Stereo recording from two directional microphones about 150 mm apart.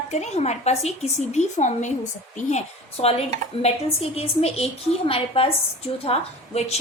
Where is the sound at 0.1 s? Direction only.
45° left (ahead or behind).